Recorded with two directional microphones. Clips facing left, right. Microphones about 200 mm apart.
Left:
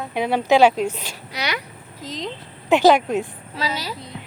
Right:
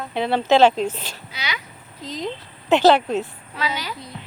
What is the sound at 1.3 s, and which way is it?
Speech, 65° left (ahead or behind).